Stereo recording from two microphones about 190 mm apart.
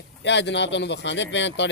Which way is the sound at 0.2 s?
70° left (ahead or behind).